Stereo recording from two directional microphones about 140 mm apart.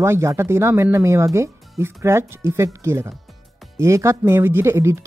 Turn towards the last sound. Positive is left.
turn(degrees=-20)  # may be behind; listen again after turning